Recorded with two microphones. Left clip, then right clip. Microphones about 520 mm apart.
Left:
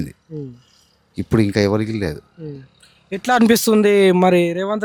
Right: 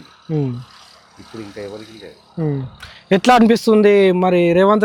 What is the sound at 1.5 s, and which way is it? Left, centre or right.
Speech, left.